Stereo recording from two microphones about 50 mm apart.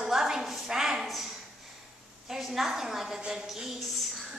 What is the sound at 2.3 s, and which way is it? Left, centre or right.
Speech, centre.